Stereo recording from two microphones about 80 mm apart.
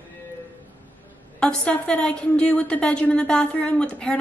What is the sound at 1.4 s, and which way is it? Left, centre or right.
A woman's voice, centre.